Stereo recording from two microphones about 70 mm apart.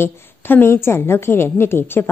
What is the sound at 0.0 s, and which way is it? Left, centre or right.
A woman's voice, left.